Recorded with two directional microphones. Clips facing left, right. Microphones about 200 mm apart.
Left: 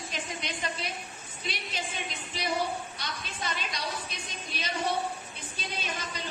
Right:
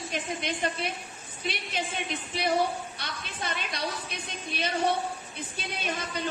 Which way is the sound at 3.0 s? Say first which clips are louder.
Right 1 dB; 55° right (ahead or behind).